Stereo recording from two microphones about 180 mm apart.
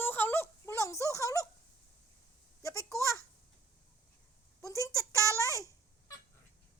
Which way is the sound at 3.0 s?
20° right (ahead or behind).